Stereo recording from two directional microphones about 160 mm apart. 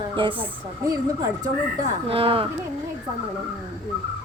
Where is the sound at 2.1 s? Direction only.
35° right (ahead or behind).